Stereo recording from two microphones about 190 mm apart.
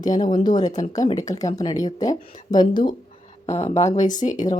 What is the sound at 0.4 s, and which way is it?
Speech, 20° left (ahead or behind).